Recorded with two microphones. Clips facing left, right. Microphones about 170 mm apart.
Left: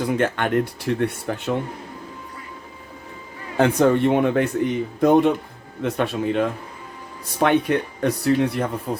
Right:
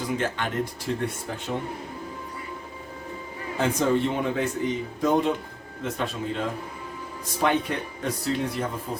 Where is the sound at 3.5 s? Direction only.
60° left (ahead or behind).